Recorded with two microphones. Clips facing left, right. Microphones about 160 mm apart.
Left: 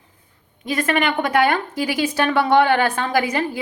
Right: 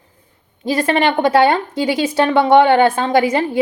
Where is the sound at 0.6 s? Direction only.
30° right (ahead or behind).